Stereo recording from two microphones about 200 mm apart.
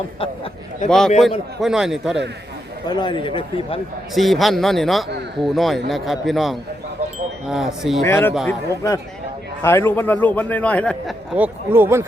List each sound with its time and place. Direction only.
0.2 s speech: 30° left (ahead or behind)
0.9 s a man's voice: centre (ahead or behind)
2.8 s a man's voice: 20° left (ahead or behind)
4.1 s a man's voice: centre (ahead or behind)
8.0 s a man's voice: 10° left (ahead or behind)
11.3 s speech: 10° right (ahead or behind)